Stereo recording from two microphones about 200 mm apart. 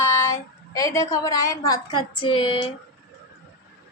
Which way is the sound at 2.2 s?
25° left (ahead or behind).